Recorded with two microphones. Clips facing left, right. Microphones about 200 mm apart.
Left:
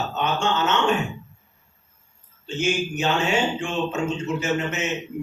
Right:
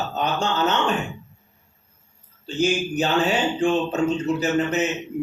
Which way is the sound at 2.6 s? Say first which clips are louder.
Right 3 dB; 35° right (ahead or behind).